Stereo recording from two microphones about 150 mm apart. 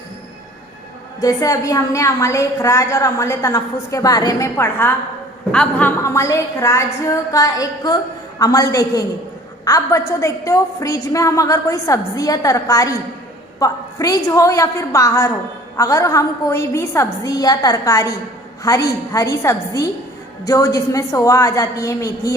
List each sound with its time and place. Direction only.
1.2 s a woman's voice: 20° left (ahead or behind)
6.0 s a woman's voice: 20° left (ahead or behind)